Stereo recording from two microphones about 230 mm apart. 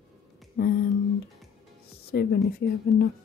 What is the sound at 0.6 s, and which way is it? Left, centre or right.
Speech, left.